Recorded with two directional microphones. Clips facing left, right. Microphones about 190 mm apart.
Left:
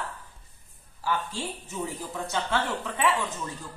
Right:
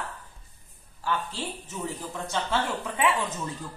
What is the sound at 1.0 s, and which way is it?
Speech, 10° left (ahead or behind).